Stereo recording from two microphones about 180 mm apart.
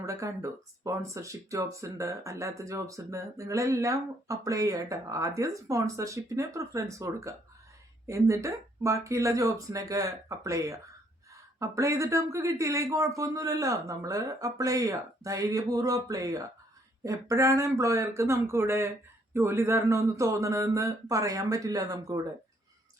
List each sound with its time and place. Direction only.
0.0 s speech: 15° right (ahead or behind)